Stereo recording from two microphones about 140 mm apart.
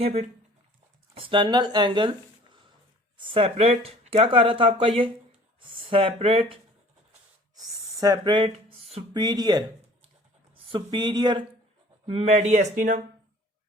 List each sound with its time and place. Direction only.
0.0 s speech: 50° right (ahead or behind)
1.1 s speech: 40° right (ahead or behind)
7.9 s speech: 30° right (ahead or behind); by 9.2 s 45° right (ahead or behind)
9.2 s speech: 30° right (ahead or behind)
12.0 s speech: 45° right (ahead or behind); by 13.0 s 65° right (ahead or behind)